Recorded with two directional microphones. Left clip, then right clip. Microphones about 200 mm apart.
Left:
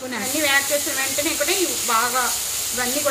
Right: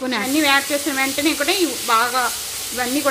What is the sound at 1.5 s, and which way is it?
Frying, 50° right (ahead or behind).